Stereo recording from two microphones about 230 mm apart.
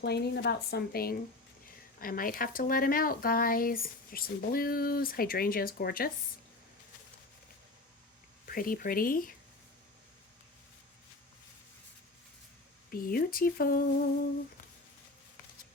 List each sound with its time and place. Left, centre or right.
0.0 s speech: left
8.4 s speech: left
12.9 s speech: left